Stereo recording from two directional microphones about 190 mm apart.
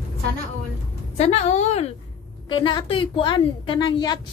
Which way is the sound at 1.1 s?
35° left (ahead or behind).